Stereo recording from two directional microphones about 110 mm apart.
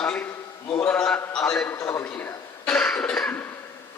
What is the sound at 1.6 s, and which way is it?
Speech, 25° left (ahead or behind).